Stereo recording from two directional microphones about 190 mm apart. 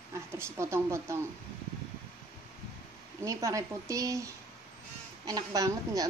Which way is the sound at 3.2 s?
15° right (ahead or behind).